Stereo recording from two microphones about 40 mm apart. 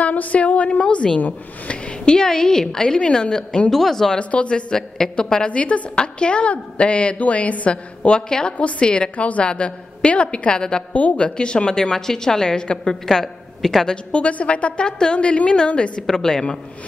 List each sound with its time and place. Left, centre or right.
0.0 s a woman's voice: left
3.7 s a woman's voice: centre
4.2 s a woman's voice: left
5.5 s a woman's voice: left
8.5 s a woman's voice: left
10.9 s a woman's voice: left
11.1 s a woman's voice: left; by 13.8 s centre
14.1 s a woman's voice: left
16.1 s a woman's voice: centre